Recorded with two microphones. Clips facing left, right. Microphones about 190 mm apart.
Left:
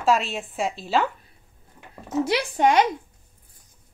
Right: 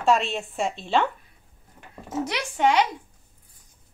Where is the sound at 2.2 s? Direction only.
35° left (ahead or behind).